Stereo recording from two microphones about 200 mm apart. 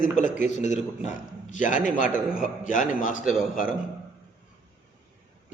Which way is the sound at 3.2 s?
5° right (ahead or behind).